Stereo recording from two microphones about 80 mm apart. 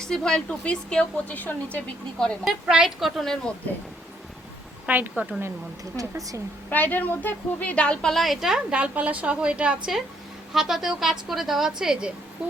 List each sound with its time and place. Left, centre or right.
0.1 s a woman's voice: centre
1.3 s a woman's voice: left
2.4 s a woman's voice: centre
4.9 s speech: right
6.0 s speech: right
6.7 s a woman's voice: left
8.1 s a woman's voice: centre